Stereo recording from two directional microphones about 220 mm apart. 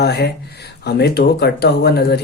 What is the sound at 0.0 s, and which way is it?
Speech, 50° left (ahead or behind).